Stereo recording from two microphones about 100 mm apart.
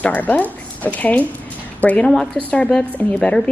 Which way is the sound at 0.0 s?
15° left (ahead or behind).